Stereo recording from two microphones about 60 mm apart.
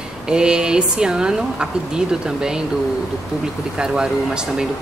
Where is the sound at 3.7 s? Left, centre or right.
Centre.